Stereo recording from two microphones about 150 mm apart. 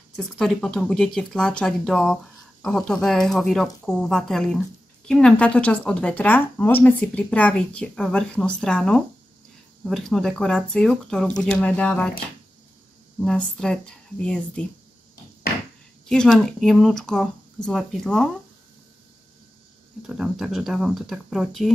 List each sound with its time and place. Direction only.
0.1 s speech: 5° left (ahead or behind)
13.2 s speech: 5° left (ahead or behind)
16.1 s speech: 5° left (ahead or behind)
20.0 s speech: 5° right (ahead or behind)